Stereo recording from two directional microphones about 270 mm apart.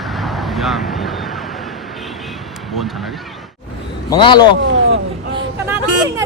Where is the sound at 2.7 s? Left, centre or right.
Centre.